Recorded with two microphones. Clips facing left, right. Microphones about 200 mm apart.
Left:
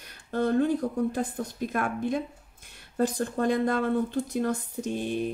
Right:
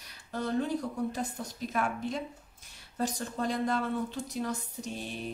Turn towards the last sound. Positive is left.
turn(degrees=55)  # may be behind; listen again after turning